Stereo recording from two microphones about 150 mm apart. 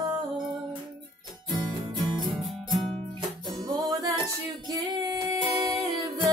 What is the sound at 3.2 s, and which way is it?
Music, 25° right (ahead or behind).